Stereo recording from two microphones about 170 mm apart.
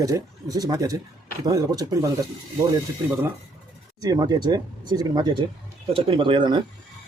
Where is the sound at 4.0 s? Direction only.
25° right (ahead or behind).